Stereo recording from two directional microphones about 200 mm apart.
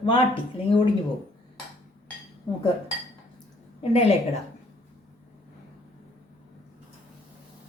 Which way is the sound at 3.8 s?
30° left (ahead or behind).